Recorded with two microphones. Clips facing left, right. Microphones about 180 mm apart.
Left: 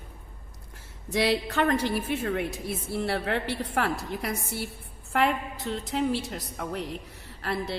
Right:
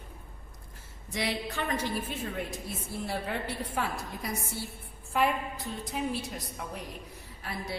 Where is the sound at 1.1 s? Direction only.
80° left.